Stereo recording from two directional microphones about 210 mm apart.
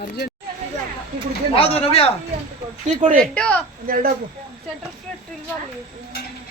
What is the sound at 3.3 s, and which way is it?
Speech, 5° left (ahead or behind).